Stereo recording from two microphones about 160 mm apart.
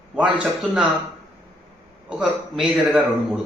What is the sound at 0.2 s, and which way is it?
Speech, 5° right (ahead or behind).